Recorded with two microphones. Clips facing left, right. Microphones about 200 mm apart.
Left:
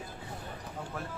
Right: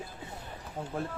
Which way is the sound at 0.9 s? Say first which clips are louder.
Right 7 dB; 25° right (ahead or behind).